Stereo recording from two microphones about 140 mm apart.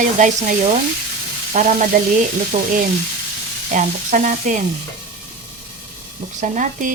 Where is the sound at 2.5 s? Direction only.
55° right (ahead or behind).